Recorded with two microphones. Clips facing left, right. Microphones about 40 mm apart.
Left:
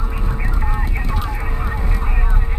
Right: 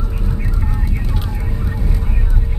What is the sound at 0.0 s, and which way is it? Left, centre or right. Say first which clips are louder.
Vehicle: even; left.